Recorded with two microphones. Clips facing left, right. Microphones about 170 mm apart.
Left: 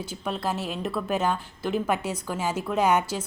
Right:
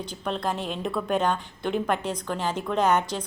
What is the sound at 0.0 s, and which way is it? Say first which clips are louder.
A woman's voice: right 1 dB; 5° left (ahead or behind).